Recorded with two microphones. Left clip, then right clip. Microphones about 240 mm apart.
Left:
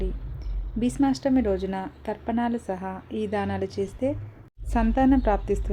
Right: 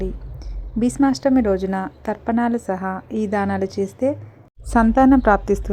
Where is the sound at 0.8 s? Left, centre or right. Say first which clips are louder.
Right 6 dB; right.